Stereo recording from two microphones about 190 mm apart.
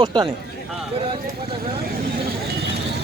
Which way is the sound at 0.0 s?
20° right (ahead or behind).